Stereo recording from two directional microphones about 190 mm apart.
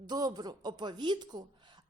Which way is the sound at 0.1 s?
20° right (ahead or behind).